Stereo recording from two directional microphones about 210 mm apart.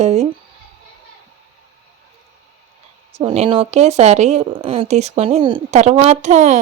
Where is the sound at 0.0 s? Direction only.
30° right (ahead or behind).